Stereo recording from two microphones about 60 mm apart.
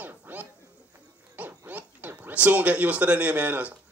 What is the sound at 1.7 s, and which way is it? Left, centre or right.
A man's voice, right.